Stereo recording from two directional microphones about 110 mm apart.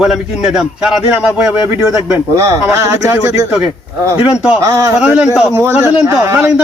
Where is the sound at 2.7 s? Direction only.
25° right (ahead or behind).